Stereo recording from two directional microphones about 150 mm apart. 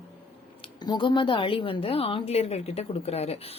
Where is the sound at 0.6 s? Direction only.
30° left (ahead or behind).